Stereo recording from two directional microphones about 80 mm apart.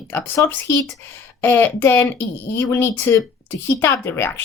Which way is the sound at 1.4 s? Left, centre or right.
Left.